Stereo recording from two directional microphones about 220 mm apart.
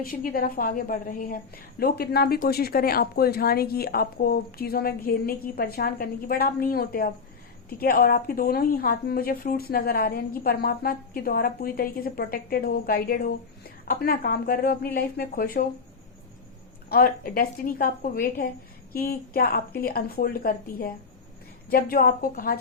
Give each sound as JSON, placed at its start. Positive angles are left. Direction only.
{"t": 0.0, "sound": "a woman's voice", "side_deg": 40}
{"t": 16.9, "sound": "a woman's voice", "side_deg": 40}